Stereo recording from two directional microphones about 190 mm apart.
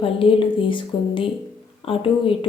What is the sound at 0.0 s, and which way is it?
Speech, 30° left (ahead or behind).